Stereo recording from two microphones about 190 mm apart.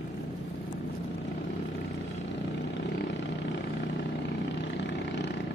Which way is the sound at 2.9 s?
65° left (ahead or behind).